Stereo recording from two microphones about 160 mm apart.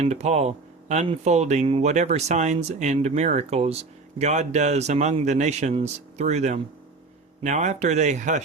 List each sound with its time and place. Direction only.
0.0 s speech: 45° right (ahead or behind)